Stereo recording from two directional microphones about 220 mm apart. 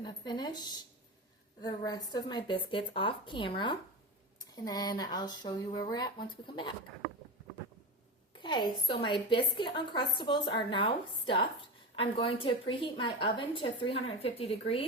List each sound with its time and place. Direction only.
0.0 s a woman's voice: 20° left (ahead or behind)
8.4 s a woman's voice: 20° left (ahead or behind)